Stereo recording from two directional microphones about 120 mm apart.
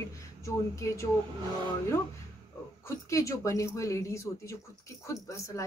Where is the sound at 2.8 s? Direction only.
25° left (ahead or behind).